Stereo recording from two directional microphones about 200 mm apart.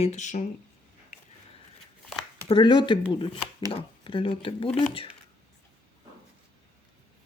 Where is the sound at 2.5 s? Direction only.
25° left (ahead or behind).